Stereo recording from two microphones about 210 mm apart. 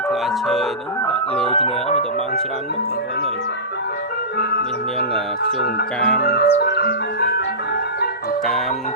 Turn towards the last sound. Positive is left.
turn(degrees=50)  # may be behind; listen again after turning